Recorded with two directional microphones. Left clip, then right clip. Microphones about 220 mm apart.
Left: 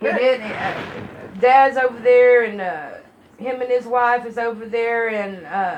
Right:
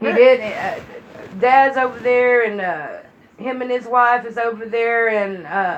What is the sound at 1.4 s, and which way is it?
Speech, 40° right (ahead or behind).